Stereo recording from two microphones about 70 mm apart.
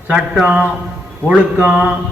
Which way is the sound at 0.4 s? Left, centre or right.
Centre.